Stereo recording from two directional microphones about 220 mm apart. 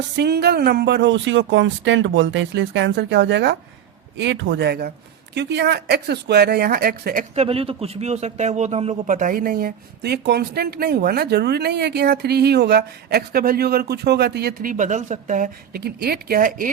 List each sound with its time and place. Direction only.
0.2 s speech: 45° right (ahead or behind)